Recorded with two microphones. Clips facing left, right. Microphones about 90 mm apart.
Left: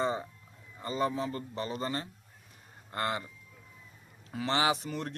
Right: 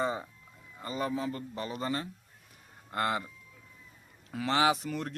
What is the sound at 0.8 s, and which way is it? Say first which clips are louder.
A man's voice: left 2 dB; 5° right (ahead or behind).